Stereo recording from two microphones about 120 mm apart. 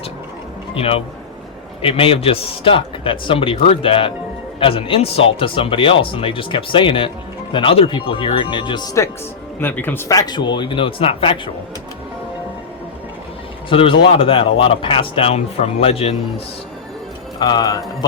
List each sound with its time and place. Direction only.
0.7 s speech: 50° left (ahead or behind)
9.6 s speech: 15° left (ahead or behind)
10.1 s speech: 35° left (ahead or behind)
13.7 s speech: 45° left (ahead or behind)
17.4 s speech: 35° left (ahead or behind)